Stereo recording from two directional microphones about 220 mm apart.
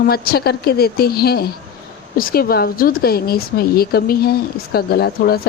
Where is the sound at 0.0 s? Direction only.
45° left (ahead or behind).